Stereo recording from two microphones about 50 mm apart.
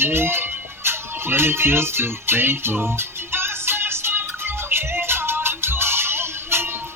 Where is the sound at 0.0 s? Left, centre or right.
Right.